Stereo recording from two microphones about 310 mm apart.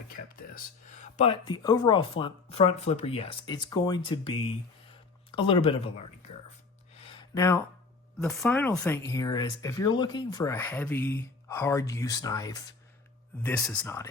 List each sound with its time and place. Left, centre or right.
0.3 s speech: left
6.9 s a sound: centre
8.2 s speech: centre